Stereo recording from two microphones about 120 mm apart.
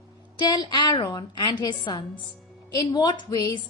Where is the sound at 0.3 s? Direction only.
35° left (ahead or behind).